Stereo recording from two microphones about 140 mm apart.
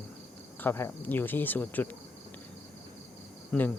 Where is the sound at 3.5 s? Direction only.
10° left (ahead or behind).